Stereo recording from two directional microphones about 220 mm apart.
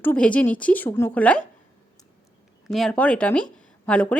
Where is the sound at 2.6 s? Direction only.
Centre (ahead or behind).